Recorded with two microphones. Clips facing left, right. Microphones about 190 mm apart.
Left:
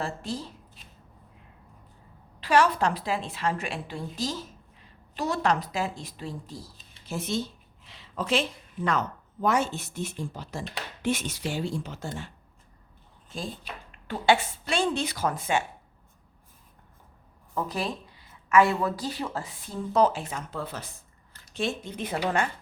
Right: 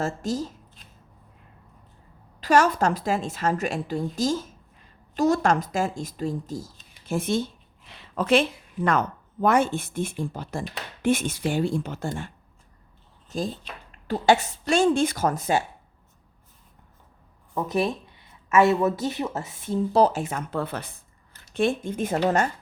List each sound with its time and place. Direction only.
0.0 s a woman's voice: 45° right (ahead or behind)
2.4 s a woman's voice: 45° right (ahead or behind)
13.2 s drawer open or close: 40° right (ahead or behind)
13.9 s a woman's voice: 40° right (ahead or behind)
17.5 s a woman's voice: 20° right (ahead or behind); by 22.4 s 45° right (ahead or behind)